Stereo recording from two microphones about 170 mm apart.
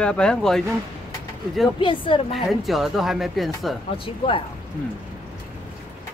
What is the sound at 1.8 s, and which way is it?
Speech, 30° left (ahead or behind).